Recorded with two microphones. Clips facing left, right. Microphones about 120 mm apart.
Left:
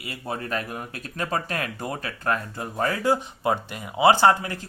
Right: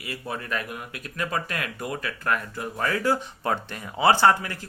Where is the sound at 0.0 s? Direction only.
25° left (ahead or behind).